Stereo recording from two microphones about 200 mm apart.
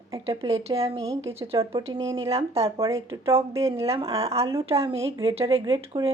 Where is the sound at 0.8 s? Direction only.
30° right (ahead or behind).